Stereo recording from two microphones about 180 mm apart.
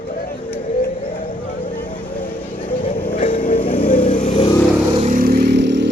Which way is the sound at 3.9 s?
50° left (ahead or behind).